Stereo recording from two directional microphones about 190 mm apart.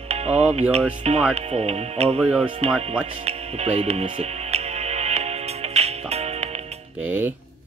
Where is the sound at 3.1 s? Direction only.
35° right (ahead or behind).